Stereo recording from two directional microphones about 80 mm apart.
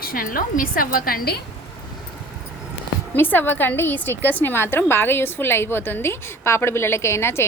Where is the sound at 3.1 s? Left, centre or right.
Left.